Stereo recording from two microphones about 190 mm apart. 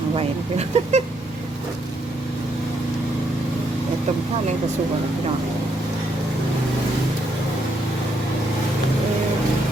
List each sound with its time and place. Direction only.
0.2 s speech: 35° right (ahead or behind)